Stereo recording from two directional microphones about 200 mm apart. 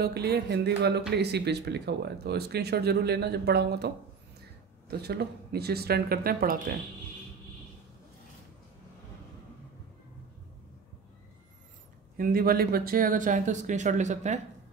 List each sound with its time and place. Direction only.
0.0 s speech: 55° right (ahead or behind)
12.2 s speech: 45° right (ahead or behind)